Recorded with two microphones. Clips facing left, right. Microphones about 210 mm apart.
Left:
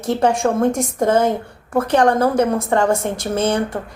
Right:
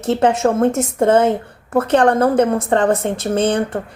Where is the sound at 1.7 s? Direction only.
55° right (ahead or behind).